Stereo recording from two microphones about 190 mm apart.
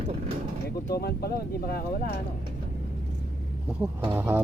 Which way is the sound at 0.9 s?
55° left (ahead or behind).